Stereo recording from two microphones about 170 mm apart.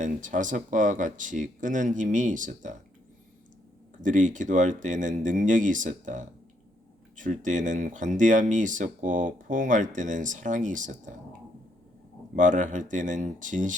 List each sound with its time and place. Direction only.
0.0 s speech: 50° right (ahead or behind)
4.0 s speech: 50° right (ahead or behind)
12.4 s speech: 50° right (ahead or behind)